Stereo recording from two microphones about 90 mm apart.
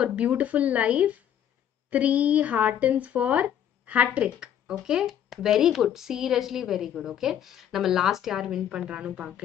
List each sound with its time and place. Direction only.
0.0 s speech: 15° right (ahead or behind)